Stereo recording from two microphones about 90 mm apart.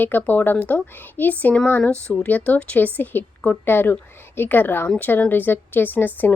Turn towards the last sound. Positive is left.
turn(degrees=20)  # may be behind; listen again after turning